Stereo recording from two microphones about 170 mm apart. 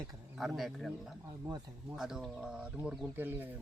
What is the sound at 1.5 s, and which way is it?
Speech, 25° right (ahead or behind).